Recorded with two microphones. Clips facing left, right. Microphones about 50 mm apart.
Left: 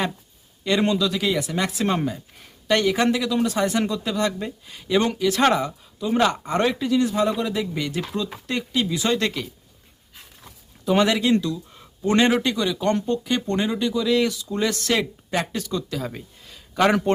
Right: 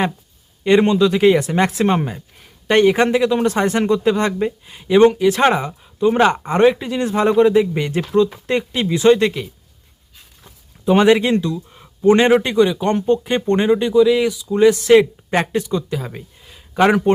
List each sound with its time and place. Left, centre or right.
0.6 s speech: right
9.2 s speech: centre
10.8 s speech: right
14.0 s speech: centre
14.9 s speech: right
16.0 s speech: centre